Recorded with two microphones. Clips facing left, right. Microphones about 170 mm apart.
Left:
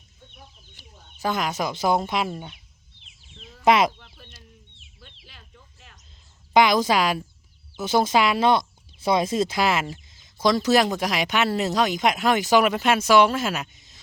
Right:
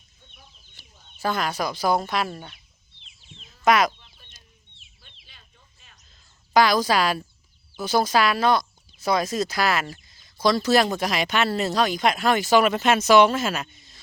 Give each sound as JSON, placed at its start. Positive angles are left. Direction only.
{"t": 0.8, "sound": "bird", "side_deg": 15}
{"t": 1.2, "sound": "speech", "side_deg": 20}
{"t": 3.7, "sound": "speech", "side_deg": 25}
{"t": 4.0, "sound": "chicken", "side_deg": 60}
{"t": 5.2, "sound": "a sound", "side_deg": 80}
{"t": 6.5, "sound": "speech", "side_deg": 20}